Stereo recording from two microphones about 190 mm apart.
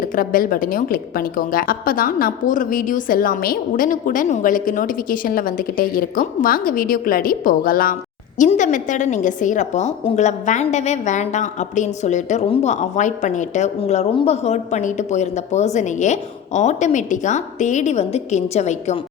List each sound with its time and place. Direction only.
0.2 s a woman's voice: 50° left (ahead or behind)